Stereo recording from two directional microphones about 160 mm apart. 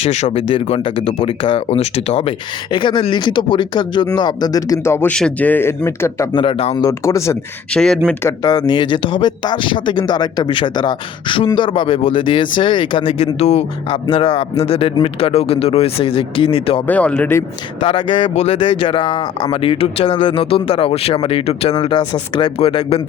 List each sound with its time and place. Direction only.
0.0 s speech: 45° left (ahead or behind); by 6.2 s 15° left (ahead or behind)
6.3 s speech: 35° left (ahead or behind)
6.8 s speech: 20° left (ahead or behind)
7.7 s speech: 5° left (ahead or behind)
8.2 s speech: 25° left (ahead or behind)
16.8 s speech: 10° left (ahead or behind)
17.8 s speech: 30° left (ahead or behind)